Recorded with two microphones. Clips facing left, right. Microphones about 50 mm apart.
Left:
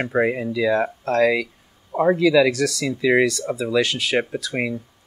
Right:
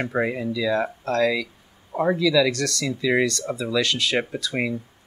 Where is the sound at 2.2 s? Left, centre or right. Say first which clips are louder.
Left 3 dB; left.